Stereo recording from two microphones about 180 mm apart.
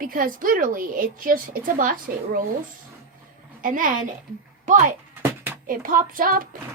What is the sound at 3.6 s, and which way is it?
A woman's voice, 50° right (ahead or behind).